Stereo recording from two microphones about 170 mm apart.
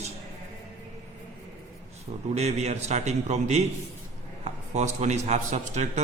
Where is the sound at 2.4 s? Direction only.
40° right (ahead or behind).